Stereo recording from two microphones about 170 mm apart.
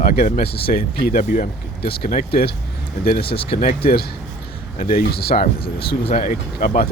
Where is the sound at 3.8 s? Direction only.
65° left (ahead or behind).